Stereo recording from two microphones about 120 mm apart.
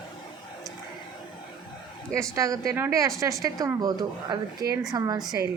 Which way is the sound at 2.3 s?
30° right (ahead or behind).